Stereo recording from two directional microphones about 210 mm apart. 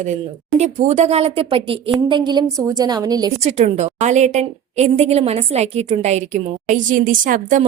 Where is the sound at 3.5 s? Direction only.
35° right (ahead or behind).